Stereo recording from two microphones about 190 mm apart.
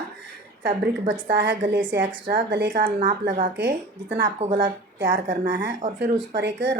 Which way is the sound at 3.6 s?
65° right (ahead or behind).